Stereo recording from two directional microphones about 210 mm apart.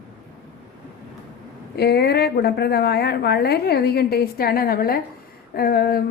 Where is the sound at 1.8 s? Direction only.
50° left (ahead or behind).